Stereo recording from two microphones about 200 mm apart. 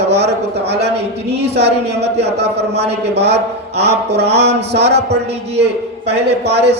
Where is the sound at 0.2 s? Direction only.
55° right (ahead or behind).